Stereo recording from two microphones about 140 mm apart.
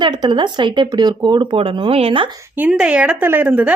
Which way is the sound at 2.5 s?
10° right (ahead or behind).